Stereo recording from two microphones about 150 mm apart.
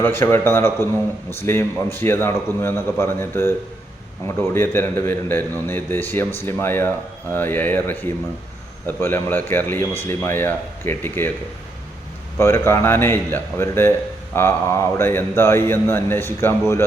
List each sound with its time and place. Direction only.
0.0 s a man's voice: 15° left (ahead or behind)
12.4 s a man's voice: 15° left (ahead or behind)